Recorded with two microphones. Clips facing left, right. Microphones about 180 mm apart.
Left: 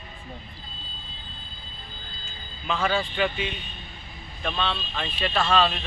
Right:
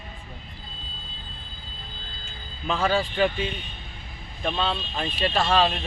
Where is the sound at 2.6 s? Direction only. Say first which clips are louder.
Right 2 dB; 35° right (ahead or behind).